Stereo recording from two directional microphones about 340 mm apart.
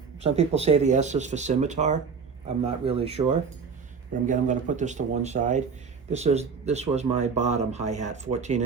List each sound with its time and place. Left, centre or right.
0.2 s speech: centre
4.3 s speech: right